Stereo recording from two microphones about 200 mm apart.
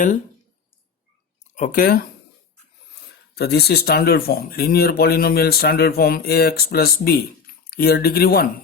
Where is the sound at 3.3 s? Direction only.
55° left (ahead or behind).